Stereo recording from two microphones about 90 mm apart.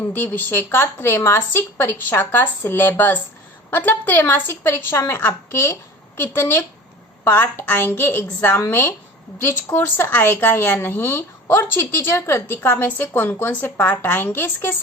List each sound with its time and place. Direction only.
0.1 s a woman's voice: 20° left (ahead or behind)